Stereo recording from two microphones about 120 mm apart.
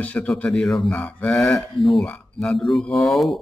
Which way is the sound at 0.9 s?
10° left (ahead or behind).